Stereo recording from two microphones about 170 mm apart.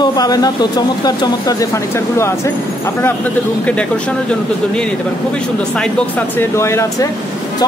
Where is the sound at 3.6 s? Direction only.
5° left (ahead or behind).